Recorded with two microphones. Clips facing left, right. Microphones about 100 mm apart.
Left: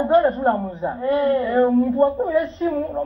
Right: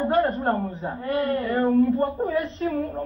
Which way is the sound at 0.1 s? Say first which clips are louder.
Left 7 dB; 15° left (ahead or behind).